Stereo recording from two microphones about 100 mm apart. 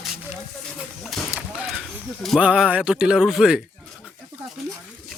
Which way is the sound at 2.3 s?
10° right (ahead or behind).